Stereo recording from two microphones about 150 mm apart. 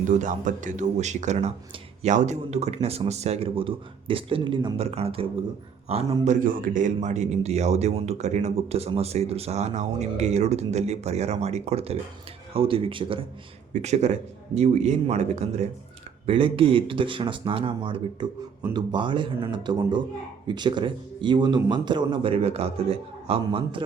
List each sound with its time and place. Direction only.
0.2 s a man's voice: 55° right (ahead or behind); by 13.2 s 35° right (ahead or behind)
13.7 s a man's voice: 50° right (ahead or behind)